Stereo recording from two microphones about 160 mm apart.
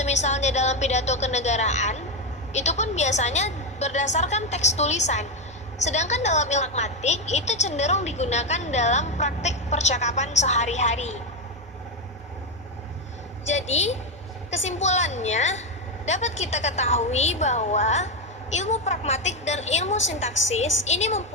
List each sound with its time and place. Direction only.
0.0 s a woman's voice: 45° left (ahead or behind)
13.4 s a woman's voice: 45° left (ahead or behind)